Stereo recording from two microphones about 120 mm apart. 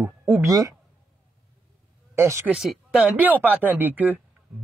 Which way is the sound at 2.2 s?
25° right (ahead or behind).